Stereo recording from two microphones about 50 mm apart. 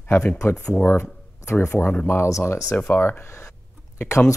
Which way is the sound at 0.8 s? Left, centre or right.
Left.